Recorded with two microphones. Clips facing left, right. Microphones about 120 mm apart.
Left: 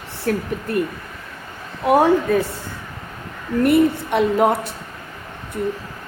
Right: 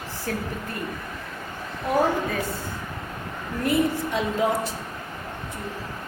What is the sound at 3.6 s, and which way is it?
Speech, 65° left (ahead or behind).